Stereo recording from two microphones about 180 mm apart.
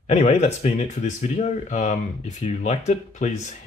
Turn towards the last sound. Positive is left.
turn(degrees=40)  # may be behind; listen again after turning